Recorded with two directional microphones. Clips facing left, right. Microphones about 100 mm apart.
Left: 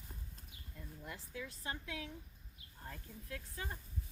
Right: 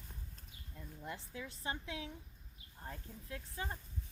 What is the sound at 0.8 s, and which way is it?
Speech, 25° right (ahead or behind).